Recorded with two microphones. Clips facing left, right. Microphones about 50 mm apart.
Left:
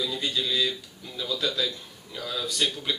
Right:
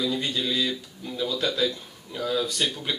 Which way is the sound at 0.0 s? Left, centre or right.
Right.